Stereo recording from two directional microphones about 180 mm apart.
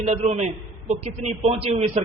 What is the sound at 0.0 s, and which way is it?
A man's voice, 40° right (ahead or behind).